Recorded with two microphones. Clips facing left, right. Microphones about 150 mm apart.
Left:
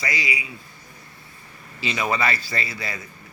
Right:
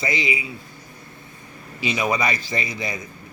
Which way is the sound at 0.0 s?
25° right (ahead or behind).